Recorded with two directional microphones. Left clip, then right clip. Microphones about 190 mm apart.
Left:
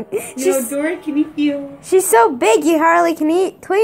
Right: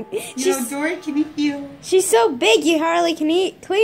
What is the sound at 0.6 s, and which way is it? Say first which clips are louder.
Speech: left 3 dB; 15° right (ahead or behind).